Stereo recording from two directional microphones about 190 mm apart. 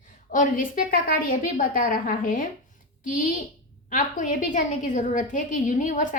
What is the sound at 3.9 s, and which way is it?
A woman's voice, 45° left (ahead or behind).